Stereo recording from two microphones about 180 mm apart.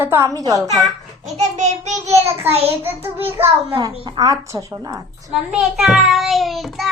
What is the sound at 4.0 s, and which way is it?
Speech, 25° right (ahead or behind).